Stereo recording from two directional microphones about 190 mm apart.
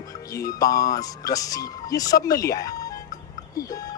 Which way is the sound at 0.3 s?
20° left (ahead or behind).